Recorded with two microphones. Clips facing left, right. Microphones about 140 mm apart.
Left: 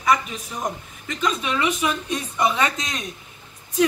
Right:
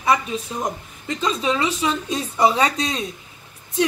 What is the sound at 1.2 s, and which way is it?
A woman's voice, 30° right (ahead or behind).